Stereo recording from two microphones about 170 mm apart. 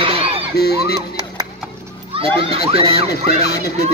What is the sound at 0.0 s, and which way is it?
Music, 35° right (ahead or behind).